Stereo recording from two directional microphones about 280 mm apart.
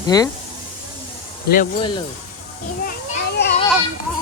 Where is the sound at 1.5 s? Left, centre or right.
Left.